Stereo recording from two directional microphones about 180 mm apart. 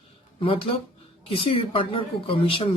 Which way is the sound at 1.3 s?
30° left (ahead or behind).